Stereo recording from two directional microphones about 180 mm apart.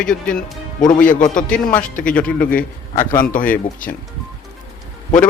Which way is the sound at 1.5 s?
5° left (ahead or behind).